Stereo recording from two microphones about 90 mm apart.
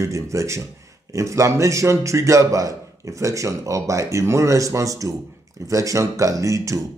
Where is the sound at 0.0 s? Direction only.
35° right (ahead or behind).